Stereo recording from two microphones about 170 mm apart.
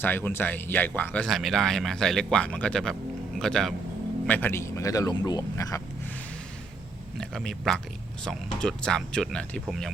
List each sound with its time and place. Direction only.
0.0 s speech: 10° left (ahead or behind)
7.2 s speech: 5° left (ahead or behind)